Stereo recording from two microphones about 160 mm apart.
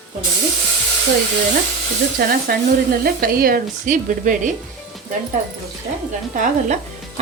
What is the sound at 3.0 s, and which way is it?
Sizzle, 65° right (ahead or behind).